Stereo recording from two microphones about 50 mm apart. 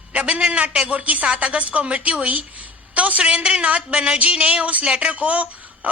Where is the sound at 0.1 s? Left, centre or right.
Right.